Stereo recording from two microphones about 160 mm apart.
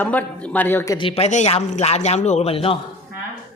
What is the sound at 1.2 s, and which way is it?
A man's voice, 45° left (ahead or behind).